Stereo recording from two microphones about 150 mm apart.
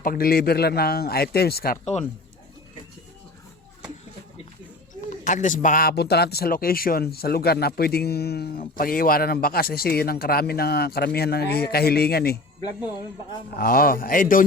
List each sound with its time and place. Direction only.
0.0 s speech: 80° left
1.8 s speech: 45° left (ahead or behind)
4.9 s speech: 55° left (ahead or behind); by 12.4 s 90° left
13.6 s a man's voice: 75° left (ahead or behind)